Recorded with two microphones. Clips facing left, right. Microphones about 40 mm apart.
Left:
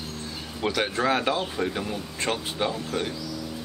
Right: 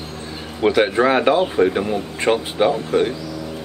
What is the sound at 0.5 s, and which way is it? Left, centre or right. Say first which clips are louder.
Speech: right 10 dB; right.